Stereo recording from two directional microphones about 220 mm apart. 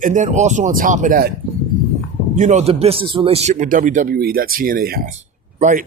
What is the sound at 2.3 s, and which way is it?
Speech, 35° right (ahead or behind).